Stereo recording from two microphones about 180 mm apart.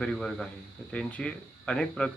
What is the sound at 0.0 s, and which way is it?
Speech, 5° left (ahead or behind).